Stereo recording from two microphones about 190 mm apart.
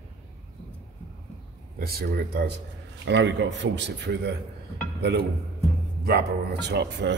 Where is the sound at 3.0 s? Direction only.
70° right (ahead or behind).